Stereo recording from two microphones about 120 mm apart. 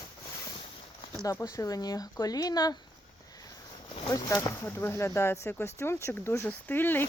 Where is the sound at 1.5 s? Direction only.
30° left (ahead or behind).